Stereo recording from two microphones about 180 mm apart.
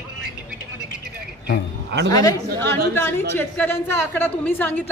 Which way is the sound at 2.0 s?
20° left (ahead or behind).